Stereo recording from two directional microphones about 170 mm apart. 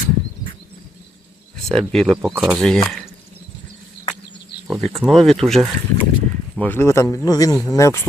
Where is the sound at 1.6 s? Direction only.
5° left (ahead or behind).